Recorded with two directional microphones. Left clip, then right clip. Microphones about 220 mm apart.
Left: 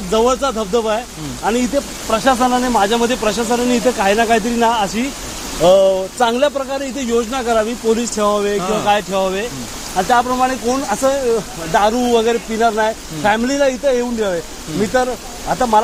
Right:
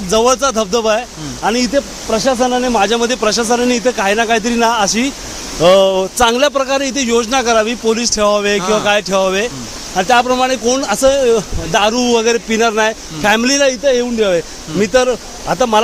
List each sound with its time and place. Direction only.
0.1 s a man's voice: 45° right (ahead or behind)
14.9 s speech: 50° right (ahead or behind)